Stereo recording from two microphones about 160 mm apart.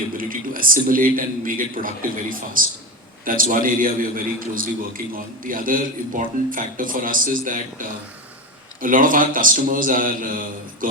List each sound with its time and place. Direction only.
0.2 s a man's voice: 60° right (ahead or behind)